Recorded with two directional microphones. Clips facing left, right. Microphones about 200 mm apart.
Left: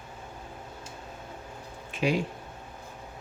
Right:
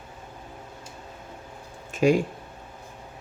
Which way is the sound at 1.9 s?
45° right (ahead or behind).